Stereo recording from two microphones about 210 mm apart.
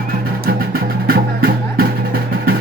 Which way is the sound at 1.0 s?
45° right (ahead or behind).